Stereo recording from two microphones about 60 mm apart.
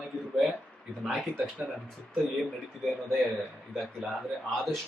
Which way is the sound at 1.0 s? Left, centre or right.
Centre.